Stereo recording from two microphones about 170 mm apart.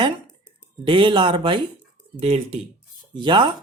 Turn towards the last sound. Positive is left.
turn(degrees=-30)  # may be behind; listen again after turning